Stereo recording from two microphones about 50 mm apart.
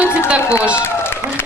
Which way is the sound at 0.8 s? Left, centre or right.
Left.